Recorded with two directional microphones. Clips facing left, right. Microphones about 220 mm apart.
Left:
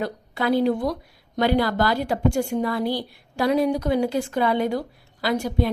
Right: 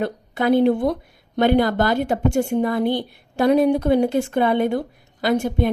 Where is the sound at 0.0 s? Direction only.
20° right (ahead or behind).